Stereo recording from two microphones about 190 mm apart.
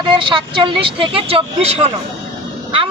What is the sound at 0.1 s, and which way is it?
Speech, 25° right (ahead or behind).